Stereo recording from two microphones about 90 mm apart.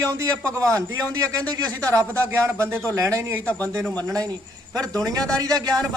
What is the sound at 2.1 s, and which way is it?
A man's voice, 30° right (ahead or behind).